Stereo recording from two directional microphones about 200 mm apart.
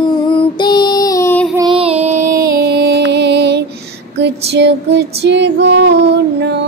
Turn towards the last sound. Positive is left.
turn(degrees=-60)  # may be behind; listen again after turning